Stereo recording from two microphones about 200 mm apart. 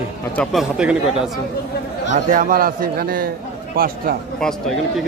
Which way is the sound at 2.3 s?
45° right (ahead or behind).